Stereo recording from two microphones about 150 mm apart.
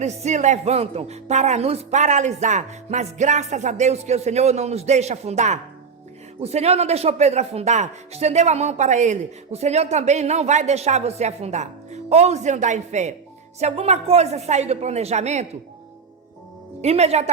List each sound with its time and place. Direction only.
0.0 s speech: 50° right (ahead or behind)
16.8 s speech: 45° right (ahead or behind)